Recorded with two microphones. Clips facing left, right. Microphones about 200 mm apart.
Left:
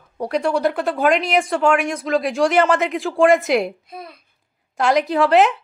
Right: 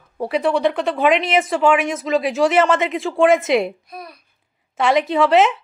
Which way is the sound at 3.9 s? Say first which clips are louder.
Even; 25° left (ahead or behind).